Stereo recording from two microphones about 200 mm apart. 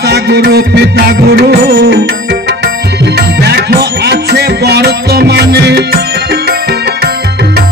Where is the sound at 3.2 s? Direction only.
55° right (ahead or behind).